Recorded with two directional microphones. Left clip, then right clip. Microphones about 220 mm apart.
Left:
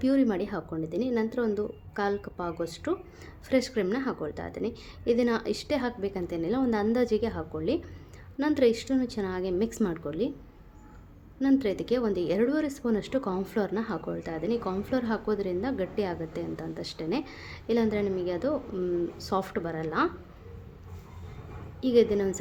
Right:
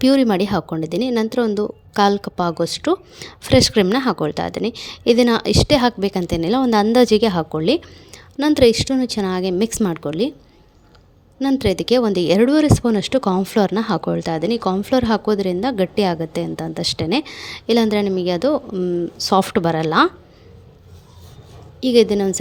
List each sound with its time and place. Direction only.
0.0 s a woman's voice: 35° right (ahead or behind)
11.6 s a woman's voice: 35° right (ahead or behind)
21.8 s a woman's voice: 35° right (ahead or behind)